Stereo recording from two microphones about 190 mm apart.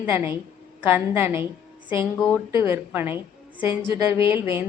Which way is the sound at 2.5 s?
15° right (ahead or behind).